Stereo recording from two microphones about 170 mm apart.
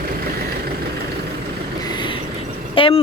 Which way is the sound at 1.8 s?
25° left (ahead or behind).